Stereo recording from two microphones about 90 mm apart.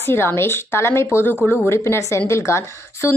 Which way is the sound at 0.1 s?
25° left (ahead or behind).